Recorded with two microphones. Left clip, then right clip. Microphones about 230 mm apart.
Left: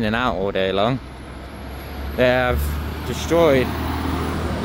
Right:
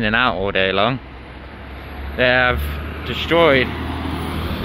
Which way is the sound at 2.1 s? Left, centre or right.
Centre.